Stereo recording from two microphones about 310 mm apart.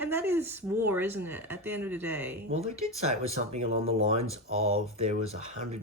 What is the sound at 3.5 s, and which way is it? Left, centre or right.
Speech, right.